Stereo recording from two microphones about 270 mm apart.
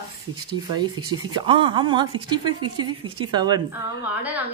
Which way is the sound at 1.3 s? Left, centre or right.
Centre.